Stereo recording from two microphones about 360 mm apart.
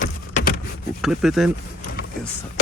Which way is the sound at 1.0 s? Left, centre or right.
Centre.